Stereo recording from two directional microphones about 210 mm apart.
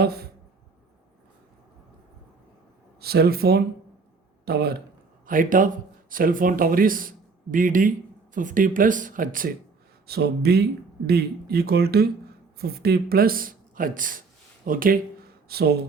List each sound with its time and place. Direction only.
0.0 s speech: 50° right (ahead or behind)
3.0 s speech: 50° right (ahead or behind)